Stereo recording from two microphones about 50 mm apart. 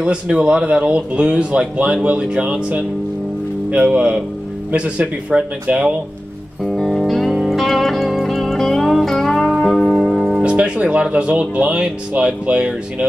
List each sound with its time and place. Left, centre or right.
0.0 s speech: right
3.7 s speech: right
6.6 s music: centre
10.4 s speech: right